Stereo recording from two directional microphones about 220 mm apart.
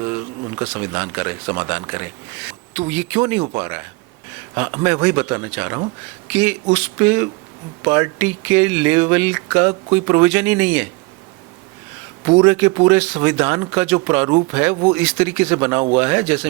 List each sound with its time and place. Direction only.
0.0 s speech: 15° right (ahead or behind)
12.2 s speech: 20° right (ahead or behind)
12.5 s speech: 10° right (ahead or behind)